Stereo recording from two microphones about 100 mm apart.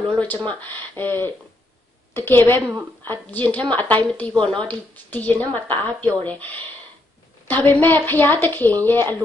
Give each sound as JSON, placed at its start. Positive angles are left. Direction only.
{"t": 0.1, "sound": "a woman's voice", "side_deg": 10}